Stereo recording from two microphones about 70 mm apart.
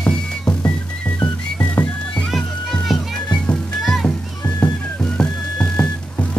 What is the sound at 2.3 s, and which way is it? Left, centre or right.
Music, centre.